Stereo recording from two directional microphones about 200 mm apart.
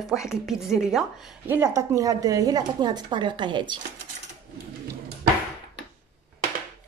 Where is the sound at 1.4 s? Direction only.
10° right (ahead or behind).